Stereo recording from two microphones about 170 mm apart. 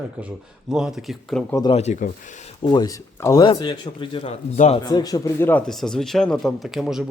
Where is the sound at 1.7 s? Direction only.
45° left (ahead or behind).